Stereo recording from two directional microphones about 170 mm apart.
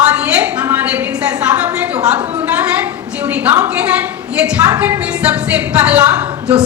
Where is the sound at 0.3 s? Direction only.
10° right (ahead or behind).